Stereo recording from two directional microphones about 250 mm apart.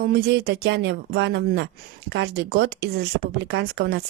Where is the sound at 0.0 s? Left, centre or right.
Right.